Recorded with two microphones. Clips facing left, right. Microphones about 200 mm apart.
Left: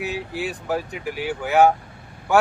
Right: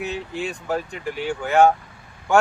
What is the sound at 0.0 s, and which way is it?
A man's voice, 5° left (ahead or behind).